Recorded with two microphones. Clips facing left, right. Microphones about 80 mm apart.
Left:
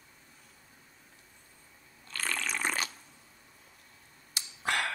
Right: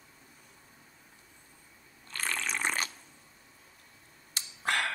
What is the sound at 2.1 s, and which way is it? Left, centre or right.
Water, right.